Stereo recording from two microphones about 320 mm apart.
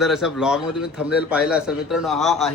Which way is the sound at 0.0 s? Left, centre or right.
Centre.